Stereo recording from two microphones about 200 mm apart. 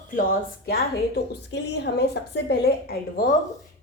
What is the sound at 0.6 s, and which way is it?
A woman's voice, 50° left (ahead or behind).